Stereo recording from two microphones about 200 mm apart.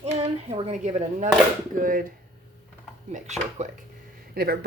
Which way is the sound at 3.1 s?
35° right (ahead or behind).